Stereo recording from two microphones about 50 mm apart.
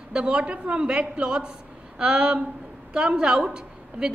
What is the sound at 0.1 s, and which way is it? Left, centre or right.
A woman's voice, right.